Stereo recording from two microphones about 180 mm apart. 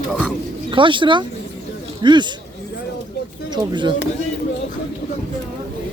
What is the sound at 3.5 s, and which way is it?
Speech, 25° right (ahead or behind).